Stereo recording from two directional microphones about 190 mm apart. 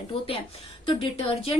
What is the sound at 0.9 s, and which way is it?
Speech, 30° left (ahead or behind).